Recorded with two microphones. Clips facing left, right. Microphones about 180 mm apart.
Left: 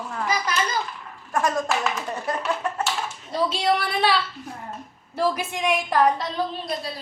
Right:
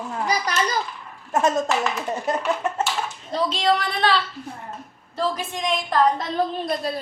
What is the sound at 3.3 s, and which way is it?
Speech, 10° left (ahead or behind).